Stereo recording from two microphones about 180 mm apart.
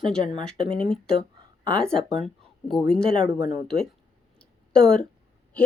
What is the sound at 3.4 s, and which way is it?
Speech, 40° left (ahead or behind).